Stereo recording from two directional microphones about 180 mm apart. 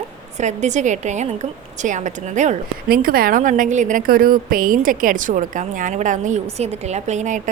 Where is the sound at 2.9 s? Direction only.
55° right (ahead or behind).